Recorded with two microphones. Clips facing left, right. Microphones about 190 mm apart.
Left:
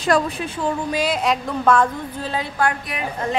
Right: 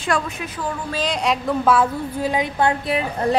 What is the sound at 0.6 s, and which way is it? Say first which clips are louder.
Speech: left 4 dB; 15° left (ahead or behind).